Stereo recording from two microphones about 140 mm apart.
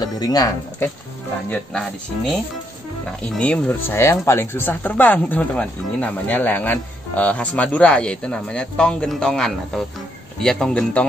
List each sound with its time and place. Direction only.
0.0 s speech: 30° left (ahead or behind)
1.5 s speech: 5° left (ahead or behind)
3.3 s speech: 10° left (ahead or behind)